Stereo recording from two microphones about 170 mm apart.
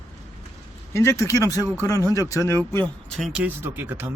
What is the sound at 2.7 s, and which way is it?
Speech, 5° left (ahead or behind).